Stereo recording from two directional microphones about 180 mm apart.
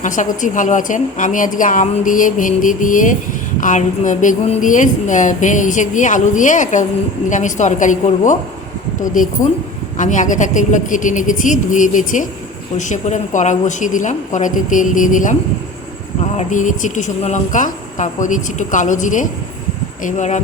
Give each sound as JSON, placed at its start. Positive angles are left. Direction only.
{"t": 0.0, "sound": "speech", "side_deg": 45}
{"t": 16.4, "sound": "speech", "side_deg": 45}